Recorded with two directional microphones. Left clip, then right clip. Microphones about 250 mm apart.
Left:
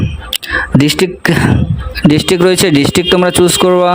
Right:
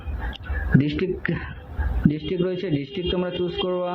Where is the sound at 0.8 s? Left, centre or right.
Left.